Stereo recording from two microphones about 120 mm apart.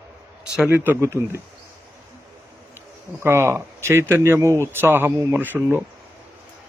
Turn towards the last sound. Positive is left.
turn(degrees=-15)  # may be behind; listen again after turning